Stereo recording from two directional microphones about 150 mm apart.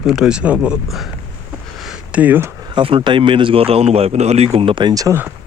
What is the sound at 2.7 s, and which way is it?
Speech, 35° right (ahead or behind).